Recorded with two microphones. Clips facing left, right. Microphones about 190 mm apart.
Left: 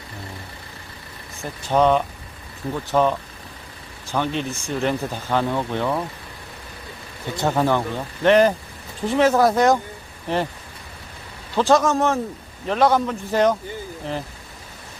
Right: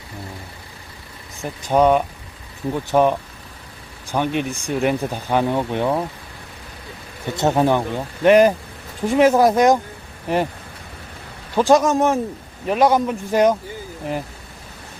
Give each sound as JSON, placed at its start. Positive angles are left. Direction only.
{"t": 1.4, "sound": "speech", "side_deg": -10}
{"t": 7.3, "sound": "speech", "side_deg": -20}
{"t": 11.5, "sound": "speech", "side_deg": -15}